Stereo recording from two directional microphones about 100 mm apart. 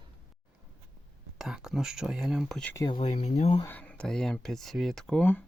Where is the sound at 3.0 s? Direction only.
90° left.